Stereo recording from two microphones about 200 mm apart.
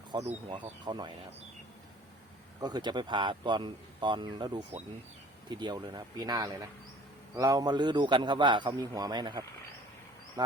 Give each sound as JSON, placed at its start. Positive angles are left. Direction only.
{"t": 0.1, "sound": "a man's voice", "side_deg": -30}
{"t": 2.6, "sound": "a man's voice", "side_deg": -20}